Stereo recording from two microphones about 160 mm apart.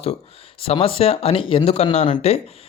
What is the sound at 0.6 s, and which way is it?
Speech, 35° left (ahead or behind).